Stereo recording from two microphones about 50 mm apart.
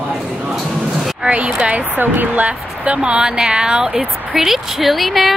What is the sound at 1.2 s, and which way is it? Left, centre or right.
Speech, right.